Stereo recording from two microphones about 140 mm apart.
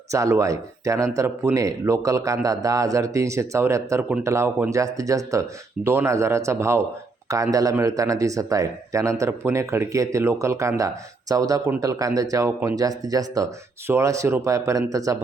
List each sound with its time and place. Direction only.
0.1 s speech: 20° right (ahead or behind)